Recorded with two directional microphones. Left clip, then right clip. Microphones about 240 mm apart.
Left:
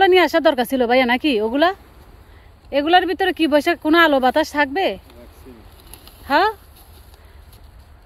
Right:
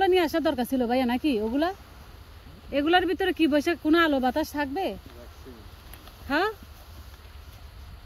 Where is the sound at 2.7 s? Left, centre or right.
Centre.